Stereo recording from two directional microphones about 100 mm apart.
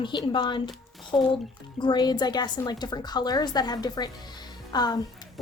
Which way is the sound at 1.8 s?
45° left (ahead or behind).